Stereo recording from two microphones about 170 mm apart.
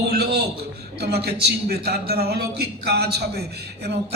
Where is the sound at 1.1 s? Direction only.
65° right (ahead or behind).